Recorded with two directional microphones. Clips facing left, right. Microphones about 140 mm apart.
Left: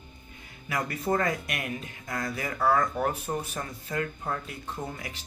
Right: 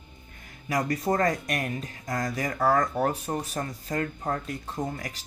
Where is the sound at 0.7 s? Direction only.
40° right (ahead or behind).